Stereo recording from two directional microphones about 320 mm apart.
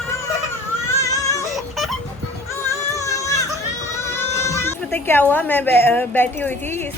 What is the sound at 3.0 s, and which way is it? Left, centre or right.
Music, centre.